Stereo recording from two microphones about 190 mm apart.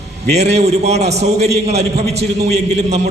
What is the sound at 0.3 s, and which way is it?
Speech, 60° right (ahead or behind).